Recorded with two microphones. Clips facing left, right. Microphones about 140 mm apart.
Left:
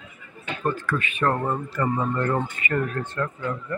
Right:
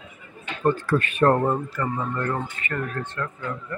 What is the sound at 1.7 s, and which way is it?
Speech, 20° left (ahead or behind).